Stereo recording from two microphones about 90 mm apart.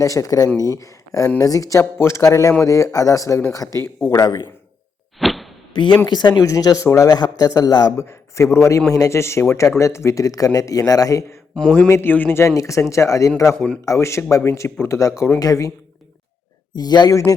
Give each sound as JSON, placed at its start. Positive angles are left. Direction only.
{"t": 0.0, "sound": "speech", "side_deg": 40}
{"t": 1.8, "sound": "speech", "side_deg": 30}
{"t": 5.2, "sound": "a sound", "side_deg": 0}
{"t": 5.7, "sound": "speech", "side_deg": 65}
{"t": 6.4, "sound": "speech", "side_deg": 40}
{"t": 8.5, "sound": "a man's voice", "side_deg": 30}
{"t": 16.7, "sound": "speech", "side_deg": 50}